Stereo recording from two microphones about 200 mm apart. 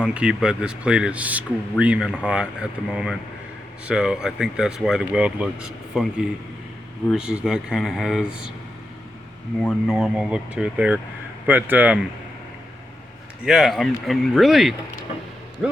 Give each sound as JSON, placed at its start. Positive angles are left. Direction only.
{"t": 0.0, "sound": "speech", "side_deg": -5}
{"t": 9.6, "sound": "a man's voice", "side_deg": 0}
{"t": 13.4, "sound": "speech", "side_deg": 0}